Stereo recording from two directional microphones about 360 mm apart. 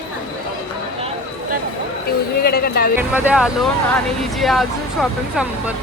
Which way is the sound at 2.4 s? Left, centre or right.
Left.